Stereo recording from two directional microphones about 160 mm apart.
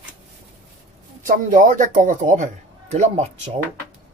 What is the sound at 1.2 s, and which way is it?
Speech, 55° right (ahead or behind).